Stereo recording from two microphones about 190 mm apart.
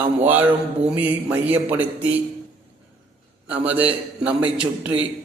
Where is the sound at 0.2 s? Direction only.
10° right (ahead or behind).